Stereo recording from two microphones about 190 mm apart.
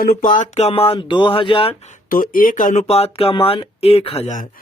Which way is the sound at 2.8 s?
30° left (ahead or behind).